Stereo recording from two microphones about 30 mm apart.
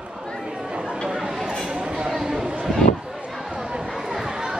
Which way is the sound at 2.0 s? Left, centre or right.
Centre.